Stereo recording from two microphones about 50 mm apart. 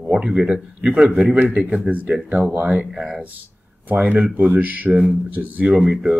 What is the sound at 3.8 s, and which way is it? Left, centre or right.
Speech, right.